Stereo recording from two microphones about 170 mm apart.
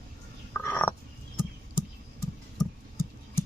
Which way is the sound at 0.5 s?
10° left (ahead or behind).